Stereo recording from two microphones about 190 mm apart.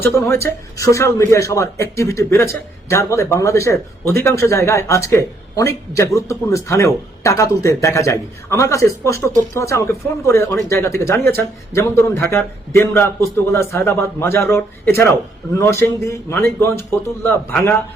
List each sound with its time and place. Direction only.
0.0 s a man's voice: 15° left (ahead or behind)